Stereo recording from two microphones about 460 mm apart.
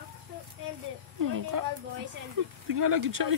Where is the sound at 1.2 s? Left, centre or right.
Right.